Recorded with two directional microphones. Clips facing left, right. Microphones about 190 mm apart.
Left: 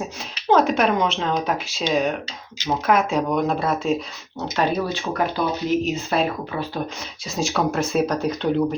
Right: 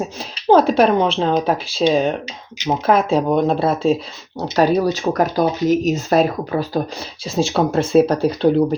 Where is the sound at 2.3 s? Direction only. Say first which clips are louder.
Right 4 dB; 15° right (ahead or behind).